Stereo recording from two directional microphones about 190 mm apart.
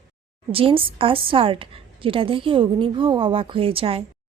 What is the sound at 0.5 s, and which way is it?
A woman's voice, 30° right (ahead or behind).